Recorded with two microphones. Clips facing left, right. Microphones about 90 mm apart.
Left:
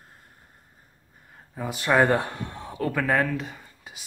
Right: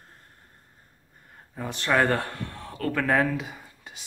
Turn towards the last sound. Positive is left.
turn(degrees=0)  # may be behind; listen again after turning